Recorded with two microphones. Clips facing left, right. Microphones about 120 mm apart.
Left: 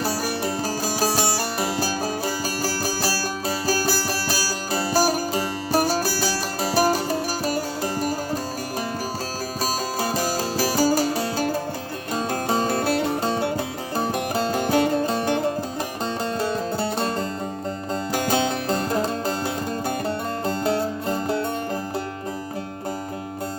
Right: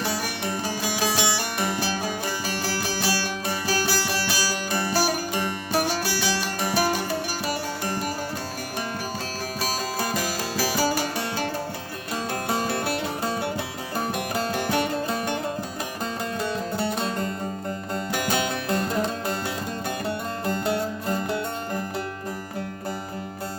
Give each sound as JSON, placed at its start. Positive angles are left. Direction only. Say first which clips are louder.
{"t": 0.0, "sound": "music", "louder": "left 3 dB", "side_deg": 40}
{"t": 10.0, "sound": "music", "louder": "left 5 dB", "side_deg": 35}
{"t": 16.4, "sound": "music", "louder": "left 1 dB", "side_deg": 35}
{"t": 20.4, "sound": "music", "louder": "left 2 dB", "side_deg": 30}